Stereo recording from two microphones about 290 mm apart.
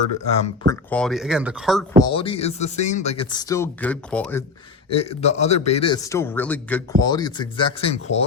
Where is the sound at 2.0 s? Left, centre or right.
Centre.